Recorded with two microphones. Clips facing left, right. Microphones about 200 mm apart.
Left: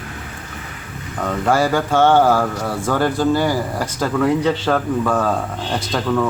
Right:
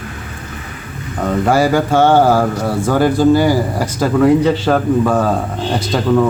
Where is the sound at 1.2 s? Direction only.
10° right (ahead or behind).